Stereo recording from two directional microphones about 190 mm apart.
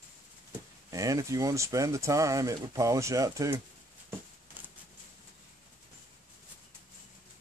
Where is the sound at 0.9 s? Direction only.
15° right (ahead or behind).